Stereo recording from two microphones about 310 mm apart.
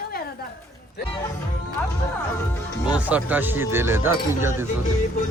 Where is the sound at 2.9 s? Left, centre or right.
Centre.